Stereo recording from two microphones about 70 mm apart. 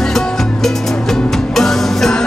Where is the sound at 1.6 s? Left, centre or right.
Centre.